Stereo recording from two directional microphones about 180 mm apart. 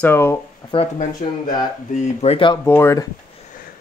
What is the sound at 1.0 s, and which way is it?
Speech, 50° left (ahead or behind).